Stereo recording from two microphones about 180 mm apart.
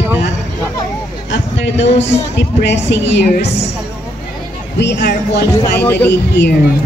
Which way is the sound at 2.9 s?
80° left.